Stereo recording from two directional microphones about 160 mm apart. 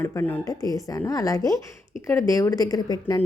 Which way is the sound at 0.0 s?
10° left (ahead or behind).